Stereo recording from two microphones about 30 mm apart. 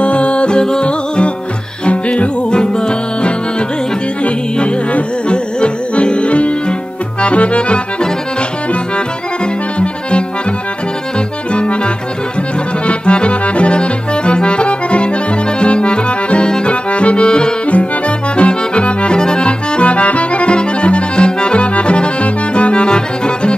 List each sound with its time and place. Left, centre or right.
0.0 s music: left
2.5 s music: left
7.2 s accordion: left
12.8 s accordion: left
17.6 s accordion: left
18.3 s accordion: left